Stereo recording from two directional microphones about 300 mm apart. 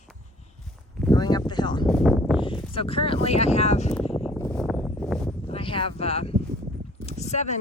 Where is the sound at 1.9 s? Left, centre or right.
Centre.